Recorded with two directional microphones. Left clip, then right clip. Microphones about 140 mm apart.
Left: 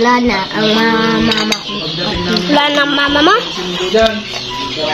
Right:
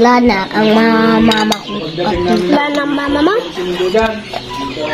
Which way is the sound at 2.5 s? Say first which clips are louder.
Left 3 dB; 5° right (ahead or behind).